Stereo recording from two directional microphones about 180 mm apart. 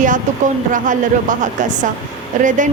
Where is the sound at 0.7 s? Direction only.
45° right (ahead or behind).